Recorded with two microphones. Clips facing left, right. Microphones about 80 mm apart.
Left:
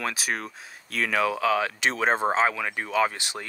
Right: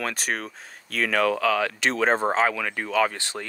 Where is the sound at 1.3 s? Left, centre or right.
Centre.